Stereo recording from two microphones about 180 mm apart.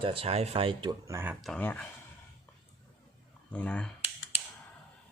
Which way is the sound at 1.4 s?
5° left (ahead or behind).